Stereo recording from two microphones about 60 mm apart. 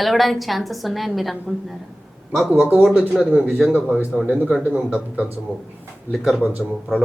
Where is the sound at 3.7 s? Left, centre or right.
Right.